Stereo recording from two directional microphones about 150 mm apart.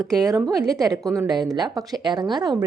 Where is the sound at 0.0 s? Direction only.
20° right (ahead or behind).